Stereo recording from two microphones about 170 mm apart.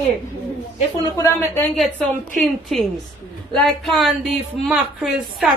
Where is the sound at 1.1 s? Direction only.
20° left (ahead or behind).